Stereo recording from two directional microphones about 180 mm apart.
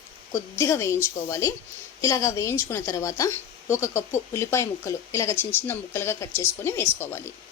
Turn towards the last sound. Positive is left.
turn(degrees=10)  # may be behind; listen again after turning